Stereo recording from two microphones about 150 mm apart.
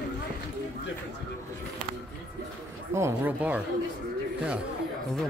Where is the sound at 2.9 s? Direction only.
20° right (ahead or behind).